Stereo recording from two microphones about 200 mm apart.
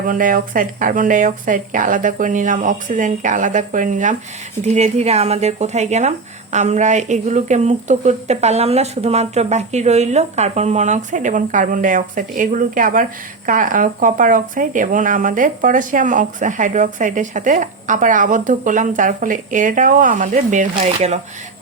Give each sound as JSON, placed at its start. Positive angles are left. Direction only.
{"t": 0.1, "sound": "speech", "side_deg": -45}